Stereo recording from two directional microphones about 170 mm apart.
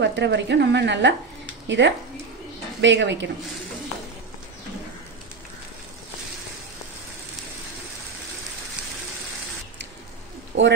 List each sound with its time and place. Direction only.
0.0 s a woman's voice: 90° right
10.5 s a woman's voice: 90° right